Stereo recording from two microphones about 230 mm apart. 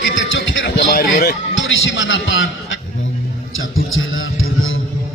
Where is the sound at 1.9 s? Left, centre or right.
Left.